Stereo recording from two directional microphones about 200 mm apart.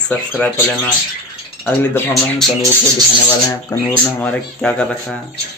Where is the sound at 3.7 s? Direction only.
10° left (ahead or behind).